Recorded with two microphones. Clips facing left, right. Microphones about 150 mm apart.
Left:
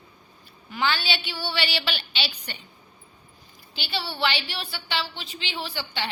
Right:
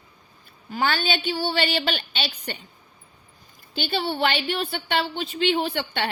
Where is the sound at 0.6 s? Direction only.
45° right (ahead or behind).